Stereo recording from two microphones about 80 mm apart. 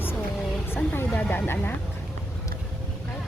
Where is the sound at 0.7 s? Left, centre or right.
Left.